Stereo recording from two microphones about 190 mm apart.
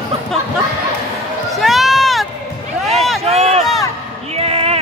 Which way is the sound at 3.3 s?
35° right (ahead or behind).